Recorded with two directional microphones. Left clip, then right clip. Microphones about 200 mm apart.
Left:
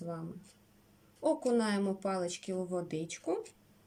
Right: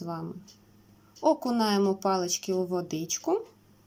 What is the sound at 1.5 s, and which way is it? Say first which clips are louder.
Speech: right 6 dB; 20° left (ahead or behind).